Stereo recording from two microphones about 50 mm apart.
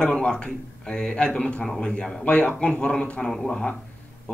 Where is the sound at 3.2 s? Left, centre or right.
Centre.